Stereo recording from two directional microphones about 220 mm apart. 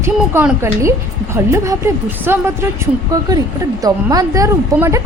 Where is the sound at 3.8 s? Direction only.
15° right (ahead or behind).